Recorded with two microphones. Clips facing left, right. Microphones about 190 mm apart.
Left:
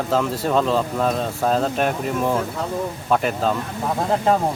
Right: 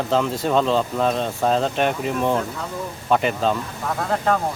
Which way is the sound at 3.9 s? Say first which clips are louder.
Left 2 dB; 25° left (ahead or behind).